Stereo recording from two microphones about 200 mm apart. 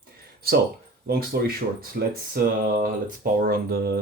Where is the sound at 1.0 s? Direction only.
50° right (ahead or behind).